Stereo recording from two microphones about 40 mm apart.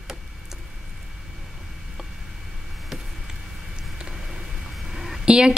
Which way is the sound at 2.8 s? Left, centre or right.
Centre.